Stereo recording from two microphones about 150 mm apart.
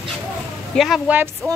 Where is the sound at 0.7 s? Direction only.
Centre (ahead or behind).